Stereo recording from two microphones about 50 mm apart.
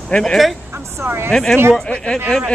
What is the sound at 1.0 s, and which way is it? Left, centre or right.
Speech, right.